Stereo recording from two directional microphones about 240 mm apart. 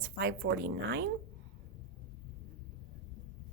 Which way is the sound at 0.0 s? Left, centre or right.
Right.